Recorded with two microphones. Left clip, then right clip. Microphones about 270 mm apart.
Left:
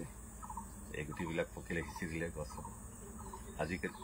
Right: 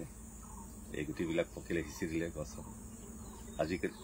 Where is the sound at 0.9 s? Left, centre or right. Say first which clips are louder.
Right 4 dB; right.